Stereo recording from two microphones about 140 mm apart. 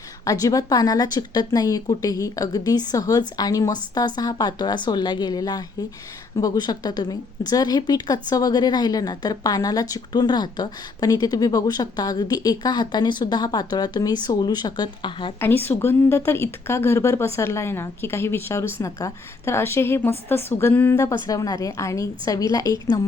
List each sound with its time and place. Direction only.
0.3 s a woman's voice: 25° left (ahead or behind)
15.4 s a woman's voice: 15° left (ahead or behind)